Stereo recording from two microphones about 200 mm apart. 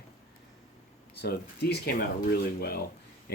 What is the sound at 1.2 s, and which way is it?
Speech, 55° left (ahead or behind).